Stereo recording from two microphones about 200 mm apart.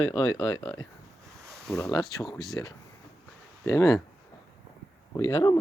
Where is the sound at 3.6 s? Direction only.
15° left (ahead or behind).